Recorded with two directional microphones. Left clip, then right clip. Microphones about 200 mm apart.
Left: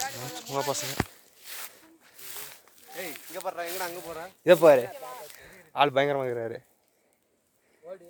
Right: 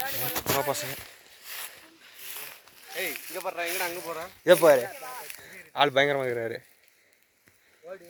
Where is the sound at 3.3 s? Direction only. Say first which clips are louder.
Even; 30° right (ahead or behind).